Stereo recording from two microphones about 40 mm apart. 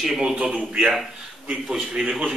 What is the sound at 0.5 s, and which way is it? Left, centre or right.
A man's voice, right.